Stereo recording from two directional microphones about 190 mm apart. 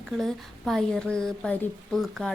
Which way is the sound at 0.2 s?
Centre (ahead or behind).